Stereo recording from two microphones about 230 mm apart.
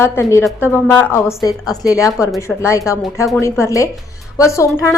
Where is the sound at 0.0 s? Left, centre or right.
Centre.